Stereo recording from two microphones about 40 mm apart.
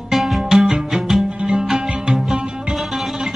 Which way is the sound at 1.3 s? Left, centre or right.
Right.